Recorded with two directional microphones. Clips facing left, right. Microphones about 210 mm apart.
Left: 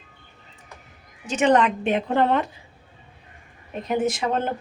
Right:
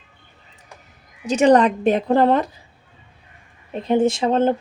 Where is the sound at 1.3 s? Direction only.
35° right (ahead or behind).